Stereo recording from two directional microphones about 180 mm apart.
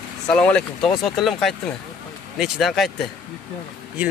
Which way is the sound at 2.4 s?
Centre (ahead or behind).